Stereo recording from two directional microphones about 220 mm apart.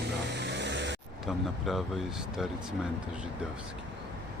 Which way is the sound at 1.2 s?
Centre (ahead or behind).